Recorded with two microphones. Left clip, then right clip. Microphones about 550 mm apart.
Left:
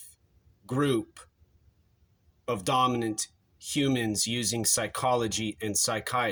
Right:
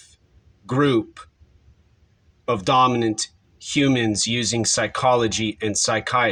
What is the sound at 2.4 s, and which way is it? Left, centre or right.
Speech, left.